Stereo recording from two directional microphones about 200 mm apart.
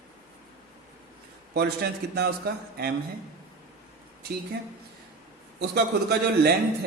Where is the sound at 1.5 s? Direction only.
55° right (ahead or behind).